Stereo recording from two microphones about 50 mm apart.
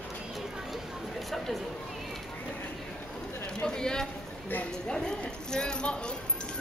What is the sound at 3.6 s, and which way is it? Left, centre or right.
Speech, centre.